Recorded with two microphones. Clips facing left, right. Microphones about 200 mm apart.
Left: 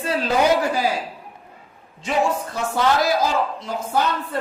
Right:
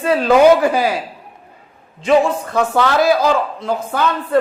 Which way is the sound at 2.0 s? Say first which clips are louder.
Right 7 dB; 75° right (ahead or behind).